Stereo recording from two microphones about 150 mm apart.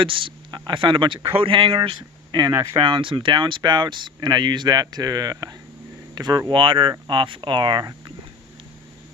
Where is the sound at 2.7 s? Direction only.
35° right (ahead or behind).